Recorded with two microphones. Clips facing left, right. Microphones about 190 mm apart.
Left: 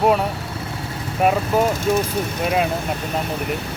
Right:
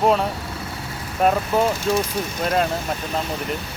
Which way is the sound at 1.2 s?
5° left (ahead or behind).